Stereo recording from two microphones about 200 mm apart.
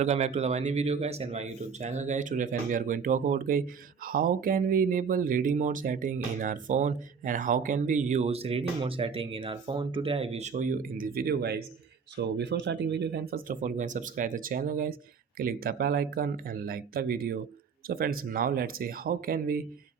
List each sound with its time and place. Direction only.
0.0 s speech: 35° right (ahead or behind)